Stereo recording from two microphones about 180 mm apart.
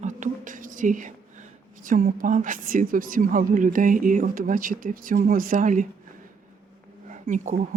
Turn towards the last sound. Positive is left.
turn(degrees=-45)  # may be behind; listen again after turning